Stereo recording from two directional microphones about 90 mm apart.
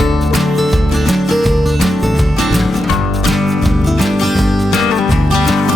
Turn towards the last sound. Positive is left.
turn(degrees=0)  # may be behind; listen again after turning